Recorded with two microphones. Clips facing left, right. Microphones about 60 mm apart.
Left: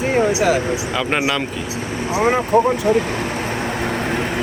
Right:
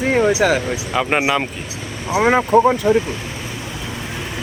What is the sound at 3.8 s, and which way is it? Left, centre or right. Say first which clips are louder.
Vehicle: left 8 dB; left.